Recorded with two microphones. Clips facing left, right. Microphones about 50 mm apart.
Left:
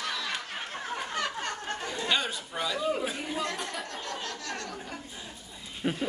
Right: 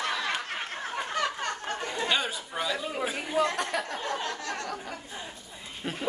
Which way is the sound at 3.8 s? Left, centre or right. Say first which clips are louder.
Right 5 dB; right.